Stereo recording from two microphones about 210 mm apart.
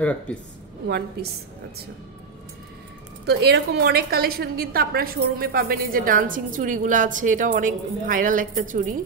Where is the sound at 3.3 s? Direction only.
50° right (ahead or behind).